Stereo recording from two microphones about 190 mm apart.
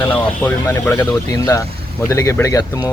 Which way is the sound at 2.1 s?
15° left (ahead or behind).